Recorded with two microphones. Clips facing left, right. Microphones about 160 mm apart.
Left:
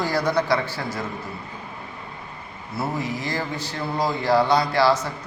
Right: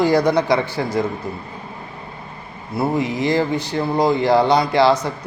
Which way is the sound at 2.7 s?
20° right (ahead or behind).